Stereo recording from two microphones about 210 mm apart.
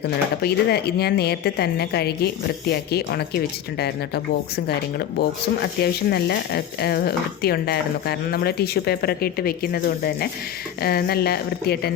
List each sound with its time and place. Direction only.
0.0 s speech: 50° left (ahead or behind)